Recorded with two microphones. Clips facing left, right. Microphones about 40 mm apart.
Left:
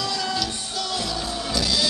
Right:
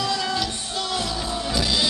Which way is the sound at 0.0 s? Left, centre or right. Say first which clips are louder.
Right 2 dB; right.